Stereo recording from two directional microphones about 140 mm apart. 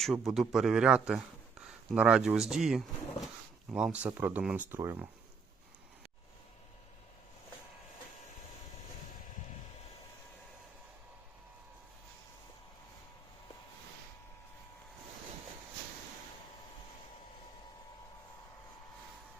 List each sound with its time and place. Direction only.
0.0 s a man's voice: centre (ahead or behind); by 5.0 s 15° right (ahead or behind)